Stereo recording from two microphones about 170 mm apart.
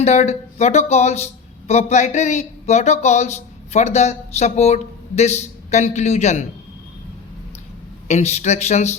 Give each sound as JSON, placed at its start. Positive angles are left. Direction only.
{"t": 0.0, "sound": "speech", "side_deg": 40}
{"t": 8.0, "sound": "speech", "side_deg": 40}